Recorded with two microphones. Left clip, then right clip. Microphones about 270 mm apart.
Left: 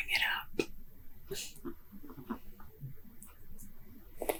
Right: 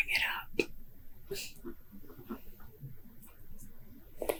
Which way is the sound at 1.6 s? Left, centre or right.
Left.